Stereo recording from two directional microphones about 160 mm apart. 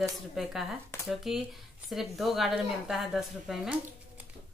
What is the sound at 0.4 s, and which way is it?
A woman's voice, 5° right (ahead or behind).